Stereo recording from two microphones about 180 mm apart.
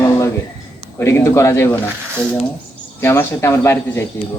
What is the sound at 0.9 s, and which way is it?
Speech, 15° left (ahead or behind).